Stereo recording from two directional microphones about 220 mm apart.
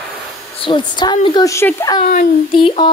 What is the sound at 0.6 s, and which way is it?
A woman's voice, 20° left (ahead or behind).